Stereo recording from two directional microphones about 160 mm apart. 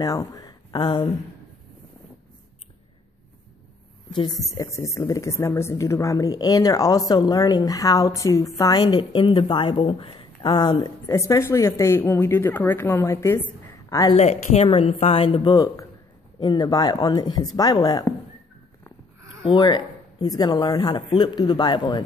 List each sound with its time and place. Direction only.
0.0 s speech: 20° left (ahead or behind)
4.1 s a woman's voice: 25° left (ahead or behind)
14.1 s a woman's voice: 45° left (ahead or behind); by 18.0 s 25° left (ahead or behind)
19.4 s a woman's voice: 30° left (ahead or behind)